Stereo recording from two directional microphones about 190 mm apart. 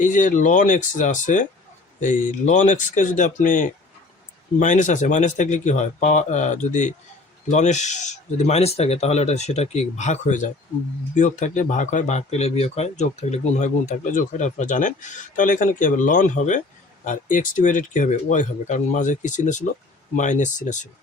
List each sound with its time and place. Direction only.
0.0 s speech: 40° left (ahead or behind)